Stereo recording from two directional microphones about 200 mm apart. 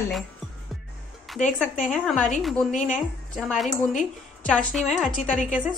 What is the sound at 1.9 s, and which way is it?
Speech, centre (ahead or behind).